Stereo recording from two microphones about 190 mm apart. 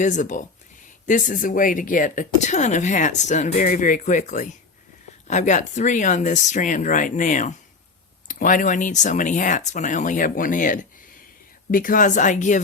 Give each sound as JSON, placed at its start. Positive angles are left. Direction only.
{"t": 0.0, "sound": "a woman's voice", "side_deg": 40}